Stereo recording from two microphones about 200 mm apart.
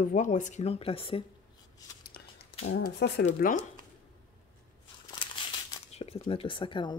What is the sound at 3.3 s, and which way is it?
Speech, 40° left (ahead or behind).